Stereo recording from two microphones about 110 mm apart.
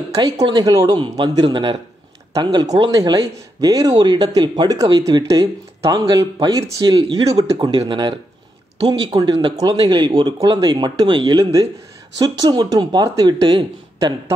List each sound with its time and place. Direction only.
0.1 s a man's voice: 30° right (ahead or behind)